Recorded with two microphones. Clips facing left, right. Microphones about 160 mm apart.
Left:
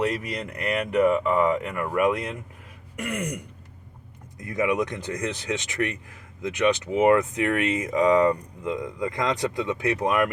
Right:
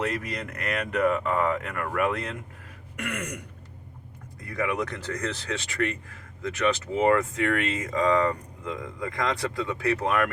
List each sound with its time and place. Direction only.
0.0 s speech: 10° left (ahead or behind)